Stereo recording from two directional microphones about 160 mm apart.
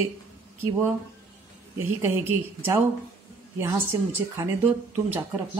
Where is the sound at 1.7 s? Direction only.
15° right (ahead or behind).